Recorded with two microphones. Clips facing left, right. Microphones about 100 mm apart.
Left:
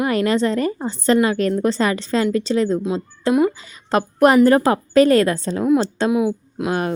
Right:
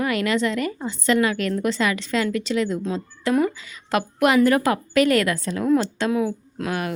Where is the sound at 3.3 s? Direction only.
15° left (ahead or behind).